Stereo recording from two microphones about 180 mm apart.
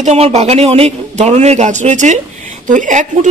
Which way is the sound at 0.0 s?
35° right (ahead or behind).